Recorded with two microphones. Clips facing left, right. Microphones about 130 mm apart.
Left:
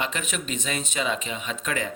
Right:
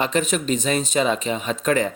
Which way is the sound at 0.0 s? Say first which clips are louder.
Right 9 dB; 35° right (ahead or behind).